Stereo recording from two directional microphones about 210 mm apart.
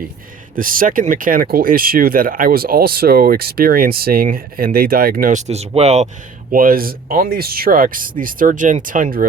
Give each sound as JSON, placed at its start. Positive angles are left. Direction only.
{"t": 0.5, "sound": "speech", "side_deg": -40}
{"t": 6.5, "sound": "speech", "side_deg": -45}